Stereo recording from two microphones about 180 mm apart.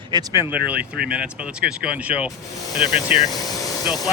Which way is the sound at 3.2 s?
20° left (ahead or behind).